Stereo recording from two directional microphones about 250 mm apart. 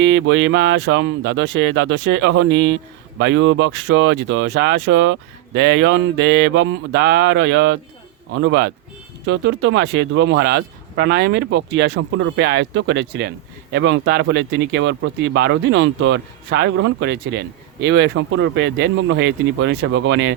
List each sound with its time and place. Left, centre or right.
0.0 s speech: right